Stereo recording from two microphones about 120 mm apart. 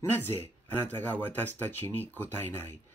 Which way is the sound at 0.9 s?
15° left (ahead or behind).